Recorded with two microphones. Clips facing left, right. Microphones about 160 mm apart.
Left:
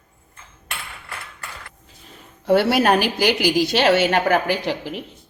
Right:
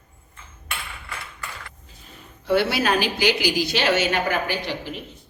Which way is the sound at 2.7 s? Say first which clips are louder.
Left 5 dB; 55° left (ahead or behind).